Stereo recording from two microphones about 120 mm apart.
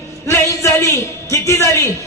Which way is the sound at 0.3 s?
25° left (ahead or behind).